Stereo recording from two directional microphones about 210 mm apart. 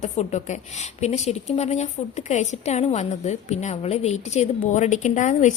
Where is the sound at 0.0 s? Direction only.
35° left (ahead or behind).